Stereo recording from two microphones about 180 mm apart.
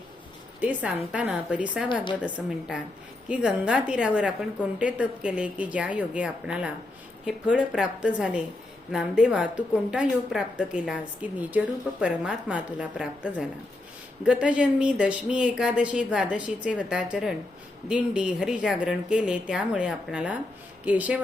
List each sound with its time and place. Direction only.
0.6 s a woman's voice: 10° right (ahead or behind)